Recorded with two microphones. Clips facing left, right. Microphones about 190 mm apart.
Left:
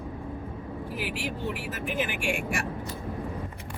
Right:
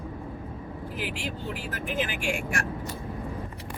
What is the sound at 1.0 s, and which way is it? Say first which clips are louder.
Speech: left 1 dB; centre (ahead or behind).